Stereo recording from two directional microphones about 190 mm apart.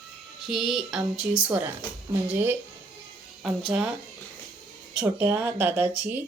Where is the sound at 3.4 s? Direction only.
5° right (ahead or behind).